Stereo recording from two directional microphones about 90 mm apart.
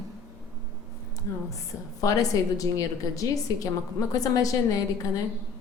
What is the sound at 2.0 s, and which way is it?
A woman's voice, 40° left (ahead or behind).